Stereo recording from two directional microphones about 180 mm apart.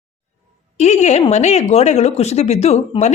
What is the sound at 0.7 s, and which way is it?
A woman's voice, 40° left (ahead or behind).